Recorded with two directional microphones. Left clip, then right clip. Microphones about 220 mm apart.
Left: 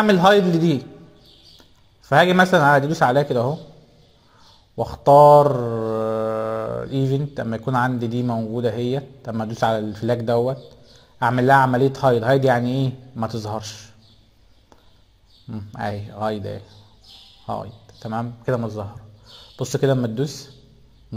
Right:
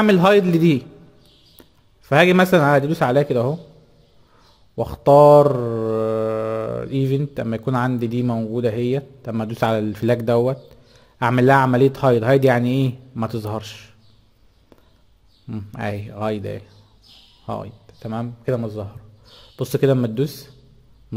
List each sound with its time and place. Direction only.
0.0 s mantra: 35° right (ahead or behind)
1.6 s a man's voice: 35° right (ahead or behind)
4.7 s mantra: 35° right (ahead or behind)
15.4 s mantra: 35° right (ahead or behind)
17.5 s a man's voice: 35° right (ahead or behind)